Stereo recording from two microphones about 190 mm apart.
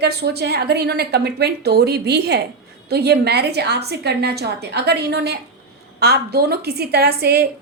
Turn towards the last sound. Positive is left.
turn(degrees=-55)  # may be behind; listen again after turning